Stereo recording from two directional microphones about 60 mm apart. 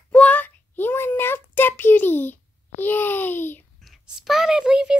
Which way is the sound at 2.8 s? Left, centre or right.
Left.